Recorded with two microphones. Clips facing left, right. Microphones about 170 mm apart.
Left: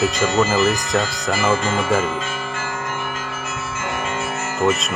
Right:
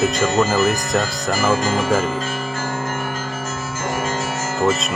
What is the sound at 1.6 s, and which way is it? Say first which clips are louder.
Speech: right 2 dB; 40° right (ahead or behind).